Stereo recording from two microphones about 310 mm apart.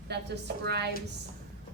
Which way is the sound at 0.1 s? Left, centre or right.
Right.